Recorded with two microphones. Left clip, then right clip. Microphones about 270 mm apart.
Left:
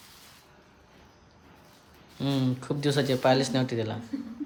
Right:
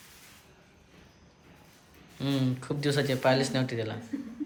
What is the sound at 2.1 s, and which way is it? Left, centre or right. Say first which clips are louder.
Speech: left 2 dB; centre.